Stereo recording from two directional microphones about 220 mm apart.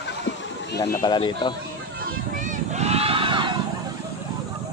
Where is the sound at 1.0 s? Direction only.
20° left (ahead or behind).